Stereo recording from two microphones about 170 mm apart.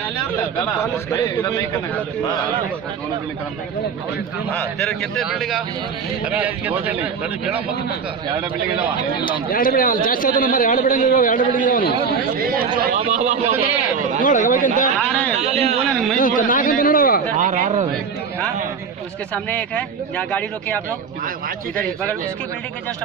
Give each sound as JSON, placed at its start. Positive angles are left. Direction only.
{"t": 1.1, "sound": "a man's voice", "side_deg": 20}
{"t": 4.5, "sound": "a man's voice", "side_deg": 5}
{"t": 9.5, "sound": "a man's voice", "side_deg": 55}
{"t": 12.4, "sound": "speech", "side_deg": -60}
{"t": 13.1, "sound": "speech", "side_deg": -45}
{"t": 14.2, "sound": "a man's voice", "side_deg": 50}
{"t": 14.9, "sound": "speech", "side_deg": 5}
{"t": 15.4, "sound": "speech", "side_deg": -40}
{"t": 16.1, "sound": "a man's voice", "side_deg": 55}
{"t": 17.3, "sound": "speech", "side_deg": -50}
{"t": 19.3, "sound": "speech", "side_deg": 10}